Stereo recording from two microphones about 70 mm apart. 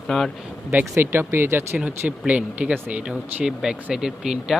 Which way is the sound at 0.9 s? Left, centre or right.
Right.